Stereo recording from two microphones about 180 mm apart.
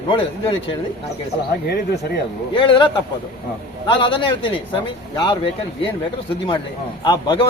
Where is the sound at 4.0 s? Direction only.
25° left (ahead or behind).